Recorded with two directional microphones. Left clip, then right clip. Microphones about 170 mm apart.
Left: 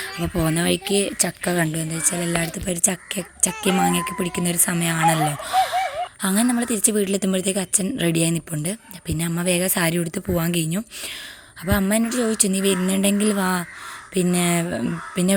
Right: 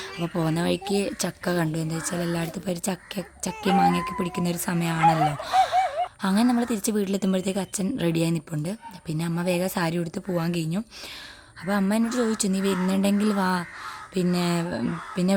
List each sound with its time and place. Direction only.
0.0 s a woman's voice: centre (ahead or behind)
4.9 s speech: 30° left (ahead or behind)
6.2 s a woman's voice: centre (ahead or behind)